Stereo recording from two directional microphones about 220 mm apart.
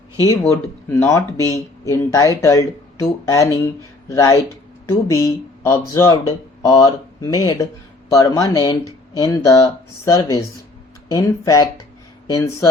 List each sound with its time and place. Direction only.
0.4 s speech: 10° left (ahead or behind)